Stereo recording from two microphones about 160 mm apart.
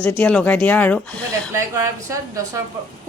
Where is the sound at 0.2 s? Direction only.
10° left (ahead or behind).